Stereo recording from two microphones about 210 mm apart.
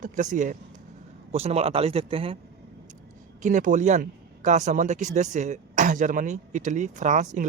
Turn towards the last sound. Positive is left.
turn(degrees=-35)  # may be behind; listen again after turning